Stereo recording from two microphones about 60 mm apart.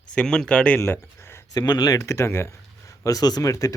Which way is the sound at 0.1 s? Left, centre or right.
Centre.